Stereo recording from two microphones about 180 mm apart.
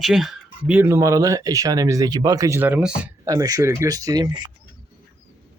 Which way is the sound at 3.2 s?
20° right (ahead or behind).